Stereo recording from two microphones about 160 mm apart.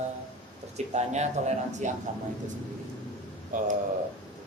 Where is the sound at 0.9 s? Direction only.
45° right (ahead or behind).